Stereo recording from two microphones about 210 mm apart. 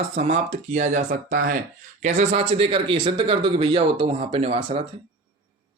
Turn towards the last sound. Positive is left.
turn(degrees=-30)  # may be behind; listen again after turning